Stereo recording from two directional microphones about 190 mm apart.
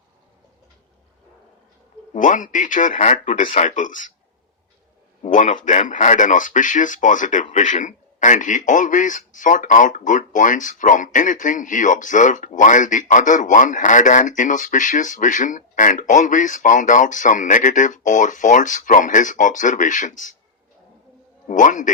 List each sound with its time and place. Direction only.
2.1 s a man's voice: 45° left (ahead or behind)
5.2 s a man's voice: 40° left (ahead or behind)
21.4 s a man's voice: 40° left (ahead or behind)